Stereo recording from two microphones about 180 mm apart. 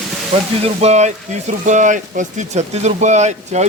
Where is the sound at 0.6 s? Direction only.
40° right (ahead or behind).